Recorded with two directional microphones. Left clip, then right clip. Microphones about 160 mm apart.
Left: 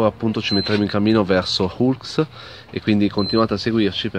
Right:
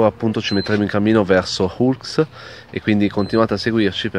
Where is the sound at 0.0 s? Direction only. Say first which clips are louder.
Right 3 dB; 20° right (ahead or behind).